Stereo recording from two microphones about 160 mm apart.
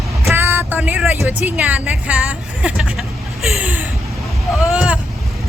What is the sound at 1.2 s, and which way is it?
Speech, 10° right (ahead or behind).